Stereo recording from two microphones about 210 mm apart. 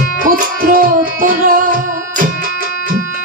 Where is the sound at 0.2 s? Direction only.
40° right (ahead or behind).